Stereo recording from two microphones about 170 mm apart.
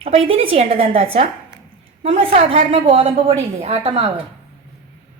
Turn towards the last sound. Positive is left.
turn(degrees=-40)  # may be behind; listen again after turning